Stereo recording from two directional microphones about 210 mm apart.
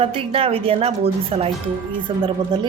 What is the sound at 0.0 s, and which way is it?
Speech, 25° right (ahead or behind).